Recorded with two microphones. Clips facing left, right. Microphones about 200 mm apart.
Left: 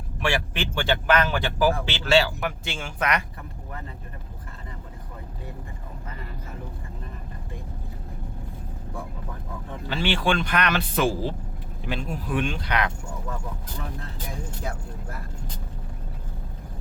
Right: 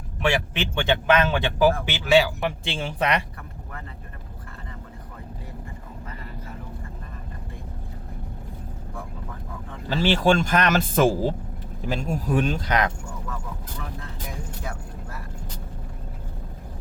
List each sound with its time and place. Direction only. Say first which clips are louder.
0.2 s speech: right 2 dB; 20° right (ahead or behind)
2.5 s speech: right 4 dB; 30° right (ahead or behind)
9.9 s speech: right 5 dB; 40° right (ahead or behind)